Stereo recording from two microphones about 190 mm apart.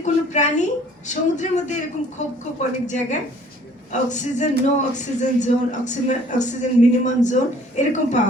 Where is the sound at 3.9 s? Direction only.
40° left (ahead or behind).